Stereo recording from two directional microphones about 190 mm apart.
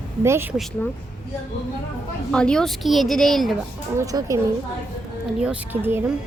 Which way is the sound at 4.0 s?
15° right (ahead or behind).